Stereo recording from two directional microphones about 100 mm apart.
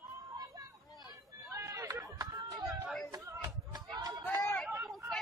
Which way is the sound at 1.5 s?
30° right (ahead or behind).